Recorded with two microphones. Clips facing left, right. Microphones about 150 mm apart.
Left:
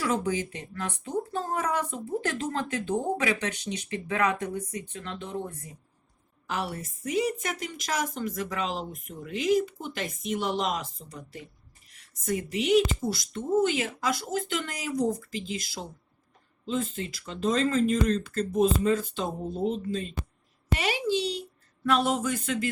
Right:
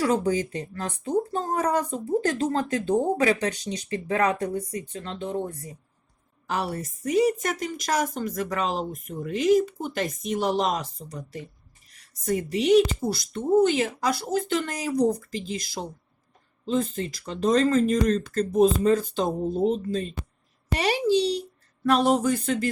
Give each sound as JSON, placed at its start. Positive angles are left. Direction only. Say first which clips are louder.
{"t": 0.0, "sound": "speech", "louder": "right 5 dB", "side_deg": -40}